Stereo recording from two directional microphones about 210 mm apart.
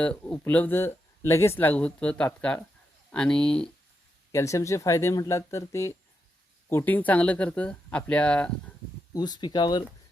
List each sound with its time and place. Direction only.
0.0 s speech: 5° left (ahead or behind)
9.1 s speech: 20° left (ahead or behind)